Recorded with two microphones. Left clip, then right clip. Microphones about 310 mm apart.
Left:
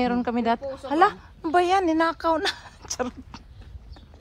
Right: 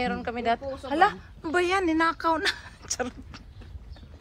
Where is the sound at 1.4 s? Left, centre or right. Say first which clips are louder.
Left 4 dB; centre.